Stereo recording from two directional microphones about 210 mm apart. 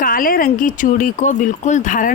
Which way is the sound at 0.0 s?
40° left (ahead or behind).